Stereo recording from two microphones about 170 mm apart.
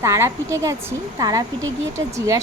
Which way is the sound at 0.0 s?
15° right (ahead or behind).